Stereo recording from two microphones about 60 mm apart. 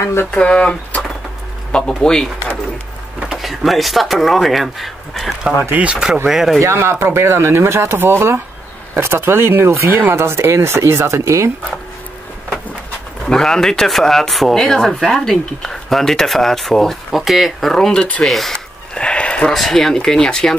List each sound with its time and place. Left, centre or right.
0.0 s speech: left
0.4 s speech: centre
3.2 s speech: centre
5.6 s speech: right
5.9 s speech: centre
6.6 s speech: right
9.8 s speech: right
13.3 s speech: centre
17.7 s speech: centre
18.9 s a sound: centre
19.5 s speech: centre